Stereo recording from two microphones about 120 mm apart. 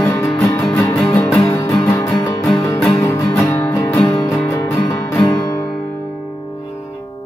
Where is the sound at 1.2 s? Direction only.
30° left (ahead or behind).